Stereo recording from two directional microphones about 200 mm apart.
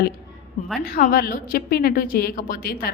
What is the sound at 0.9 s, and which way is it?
A woman's voice, 45° left (ahead or behind).